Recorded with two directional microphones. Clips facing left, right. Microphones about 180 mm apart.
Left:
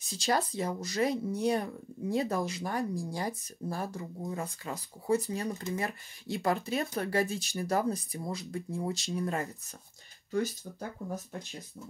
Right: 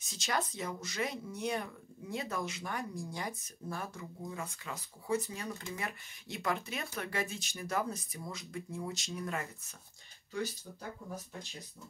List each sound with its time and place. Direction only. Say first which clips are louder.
0.1 s speech: left 6 dB; 35° left (ahead or behind)
10.3 s speech: left 7 dB; 45° left (ahead or behind)